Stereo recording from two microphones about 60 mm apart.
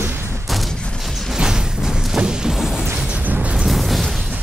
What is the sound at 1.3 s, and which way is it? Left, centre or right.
Music, centre.